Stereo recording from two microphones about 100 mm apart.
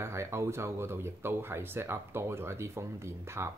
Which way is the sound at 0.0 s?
25° right (ahead or behind).